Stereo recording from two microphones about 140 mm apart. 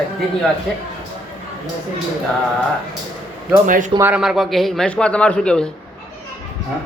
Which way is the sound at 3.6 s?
60° right (ahead or behind).